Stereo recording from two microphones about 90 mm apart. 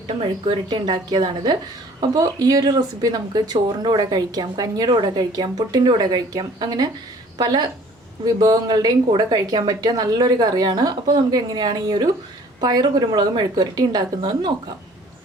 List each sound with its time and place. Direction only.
0.7 s speech: 55° right (ahead or behind)